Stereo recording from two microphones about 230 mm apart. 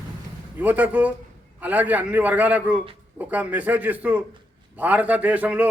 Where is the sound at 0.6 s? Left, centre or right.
Centre.